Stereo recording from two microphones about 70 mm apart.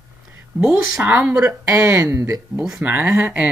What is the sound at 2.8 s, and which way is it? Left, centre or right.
Speech, right.